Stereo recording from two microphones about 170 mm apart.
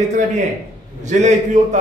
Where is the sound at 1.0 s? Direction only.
45° right (ahead or behind).